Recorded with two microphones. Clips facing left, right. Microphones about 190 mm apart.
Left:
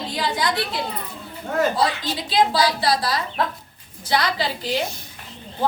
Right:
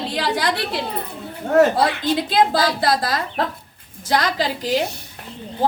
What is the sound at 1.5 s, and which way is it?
A woman's voice, 65° right (ahead or behind).